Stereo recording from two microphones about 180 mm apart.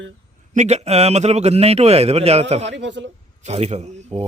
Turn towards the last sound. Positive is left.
turn(degrees=-40)  # may be behind; listen again after turning